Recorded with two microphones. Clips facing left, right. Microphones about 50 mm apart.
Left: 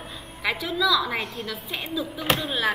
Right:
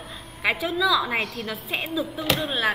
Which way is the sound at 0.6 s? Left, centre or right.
Right.